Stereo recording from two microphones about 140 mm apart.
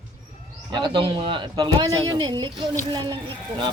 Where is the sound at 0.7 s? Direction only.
35° right (ahead or behind).